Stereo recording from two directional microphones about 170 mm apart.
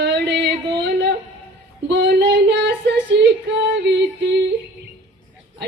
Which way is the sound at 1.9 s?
90° right.